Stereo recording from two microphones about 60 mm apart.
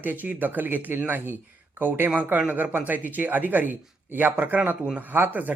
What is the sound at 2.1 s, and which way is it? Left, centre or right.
A man's voice, right.